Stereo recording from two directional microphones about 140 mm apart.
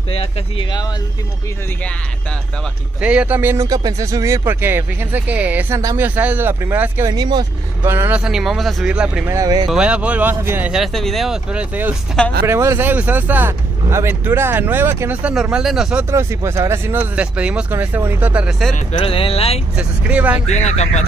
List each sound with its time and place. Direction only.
0.1 s speech: 40° left (ahead or behind)
3.0 s speech: 10° right (ahead or behind)
7.1 s speech: 30° right (ahead or behind)
7.8 s speech: 15° right (ahead or behind)
9.3 s speech: 25° right (ahead or behind)
9.7 s speech: 5° right (ahead or behind)
10.7 s speech: centre (ahead or behind)
16.1 s speech: 20° right (ahead or behind)
18.9 s speech: 40° left (ahead or behind)
19.7 s speech: 10° right (ahead or behind)
20.4 s speech: 50° left (ahead or behind)